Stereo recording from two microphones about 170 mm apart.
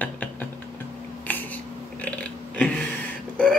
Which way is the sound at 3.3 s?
10° left (ahead or behind).